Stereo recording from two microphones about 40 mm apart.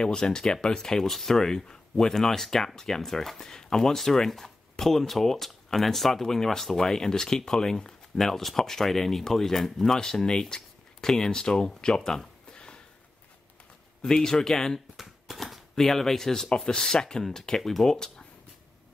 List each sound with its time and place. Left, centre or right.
0.0 s speech: centre
12.5 s a sound: left
14.0 s speech: centre